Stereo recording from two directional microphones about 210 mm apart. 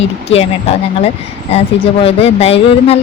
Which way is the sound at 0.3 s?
30° left (ahead or behind).